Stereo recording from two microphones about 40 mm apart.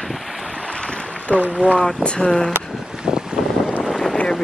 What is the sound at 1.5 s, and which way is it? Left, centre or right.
Speech, left.